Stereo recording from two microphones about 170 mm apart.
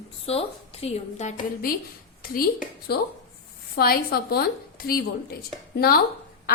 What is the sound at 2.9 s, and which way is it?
A woman's voice, 65° left (ahead or behind).